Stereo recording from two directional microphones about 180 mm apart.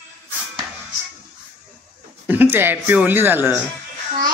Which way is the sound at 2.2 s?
10° right (ahead or behind).